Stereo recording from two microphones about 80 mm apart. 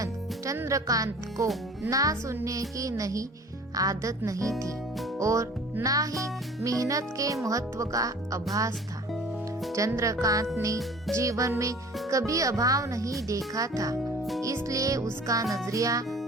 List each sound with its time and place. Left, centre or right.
0.0 s a child's voice: right
9.1 s music: centre
9.7 s a child's voice: right
14.4 s music: right
15.3 s a child's voice: right